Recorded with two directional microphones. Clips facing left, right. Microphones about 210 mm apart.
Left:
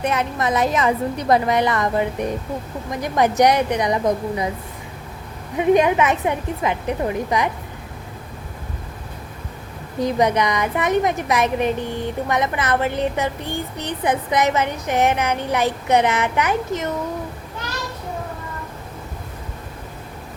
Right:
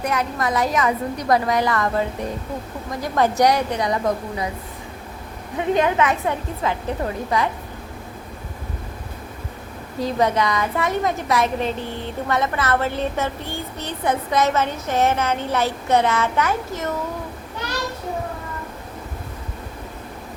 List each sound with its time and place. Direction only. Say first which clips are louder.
0.0 s a woman's voice: left 1 dB; 25° left (ahead or behind)
5.5 s a woman's voice: left 3 dB; 15° left (ahead or behind)
10.0 s a woman's voice: left 2 dB; 20° left (ahead or behind)